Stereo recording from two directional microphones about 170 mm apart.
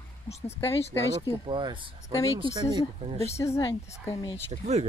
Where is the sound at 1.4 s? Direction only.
30° right (ahead or behind).